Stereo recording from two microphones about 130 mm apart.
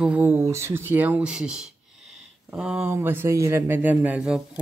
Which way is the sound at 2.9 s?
20° right (ahead or behind).